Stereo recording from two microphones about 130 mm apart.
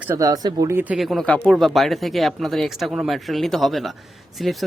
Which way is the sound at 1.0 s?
Centre (ahead or behind).